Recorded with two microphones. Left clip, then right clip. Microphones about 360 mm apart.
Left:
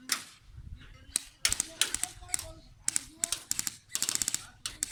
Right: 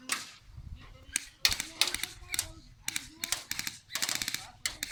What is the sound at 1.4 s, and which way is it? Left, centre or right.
Typing, centre.